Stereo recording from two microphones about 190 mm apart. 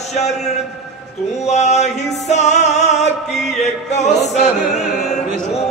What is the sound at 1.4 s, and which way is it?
Music, 35° left (ahead or behind).